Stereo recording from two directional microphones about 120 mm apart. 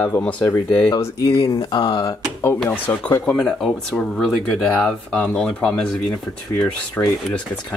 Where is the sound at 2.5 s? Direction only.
20° left (ahead or behind).